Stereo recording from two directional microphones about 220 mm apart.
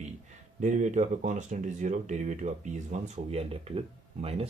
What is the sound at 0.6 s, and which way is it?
Speech, 35° right (ahead or behind).